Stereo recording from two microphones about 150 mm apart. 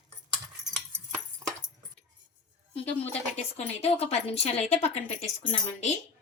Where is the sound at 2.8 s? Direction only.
45° left (ahead or behind).